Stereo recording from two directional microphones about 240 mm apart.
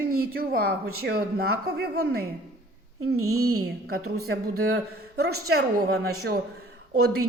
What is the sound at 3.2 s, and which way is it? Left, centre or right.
Speech, right.